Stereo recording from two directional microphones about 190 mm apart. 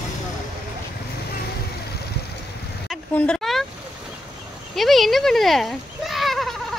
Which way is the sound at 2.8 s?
5° left (ahead or behind).